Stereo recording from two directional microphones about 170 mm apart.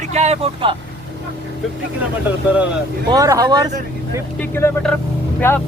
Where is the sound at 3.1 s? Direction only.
20° right (ahead or behind).